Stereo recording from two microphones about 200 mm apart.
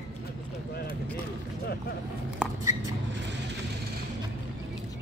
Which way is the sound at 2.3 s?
15° right (ahead or behind).